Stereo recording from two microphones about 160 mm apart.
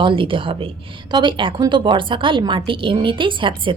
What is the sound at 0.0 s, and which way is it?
A woman's voice, 35° right (ahead or behind).